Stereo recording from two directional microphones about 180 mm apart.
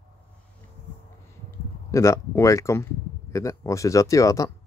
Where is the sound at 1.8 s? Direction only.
15° left (ahead or behind).